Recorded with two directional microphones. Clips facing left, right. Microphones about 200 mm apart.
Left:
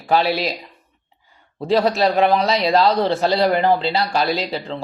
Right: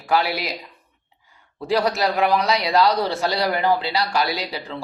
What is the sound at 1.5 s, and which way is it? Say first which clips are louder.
A man's voice: left 4 dB; 25° left (ahead or behind).